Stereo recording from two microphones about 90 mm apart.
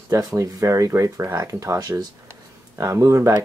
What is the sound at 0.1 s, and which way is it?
Speech, 35° right (ahead or behind).